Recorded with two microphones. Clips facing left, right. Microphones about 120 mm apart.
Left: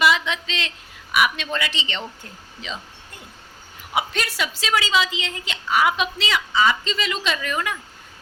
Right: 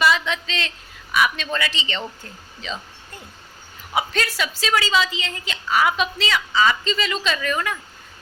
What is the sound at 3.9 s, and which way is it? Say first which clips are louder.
A woman's voice: right 1 dB; 20° left (ahead or behind).